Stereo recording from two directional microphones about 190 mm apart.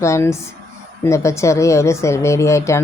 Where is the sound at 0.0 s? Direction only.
15° left (ahead or behind).